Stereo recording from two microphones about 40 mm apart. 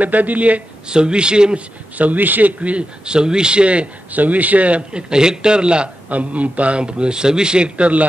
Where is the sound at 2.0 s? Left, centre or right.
Right.